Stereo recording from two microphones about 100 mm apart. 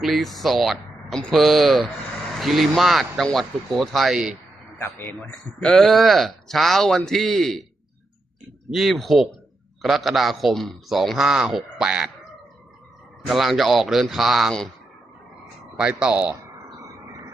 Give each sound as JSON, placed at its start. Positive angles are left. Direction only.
{"t": 0.0, "sound": "speech", "side_deg": 0}
{"t": 4.8, "sound": "a man's voice", "side_deg": 20}
{"t": 5.6, "sound": "speech", "side_deg": 5}
{"t": 8.7, "sound": "speech", "side_deg": 0}
{"t": 13.2, "sound": "speech", "side_deg": 0}
{"t": 15.8, "sound": "speech", "side_deg": -10}
{"t": 16.4, "sound": "a sound", "side_deg": -30}